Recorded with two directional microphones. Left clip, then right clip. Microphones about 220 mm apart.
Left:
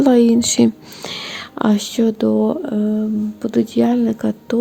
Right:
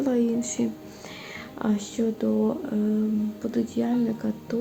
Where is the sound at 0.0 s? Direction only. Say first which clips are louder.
Left 12 dB; 40° left (ahead or behind).